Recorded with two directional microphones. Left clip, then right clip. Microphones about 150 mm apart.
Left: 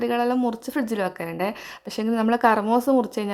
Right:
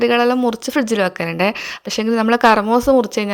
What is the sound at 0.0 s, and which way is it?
A woman's voice, 20° right (ahead or behind).